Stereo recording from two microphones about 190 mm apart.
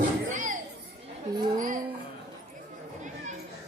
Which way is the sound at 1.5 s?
45° right (ahead or behind).